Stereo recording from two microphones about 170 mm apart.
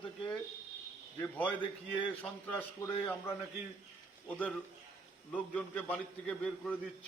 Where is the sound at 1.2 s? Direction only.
10° left (ahead or behind).